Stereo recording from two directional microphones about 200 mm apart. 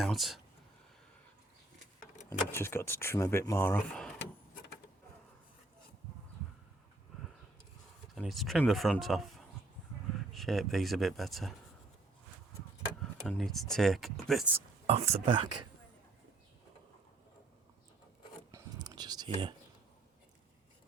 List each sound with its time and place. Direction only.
0.0 s speech: centre (ahead or behind)
2.5 s speech: 10° left (ahead or behind)
8.1 s speech: centre (ahead or behind)
13.0 s speech: centre (ahead or behind)
14.8 s speech: 30° right (ahead or behind)
18.5 s a sound: 20° right (ahead or behind)